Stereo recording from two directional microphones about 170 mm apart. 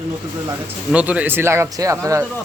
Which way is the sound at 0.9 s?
10° right (ahead or behind).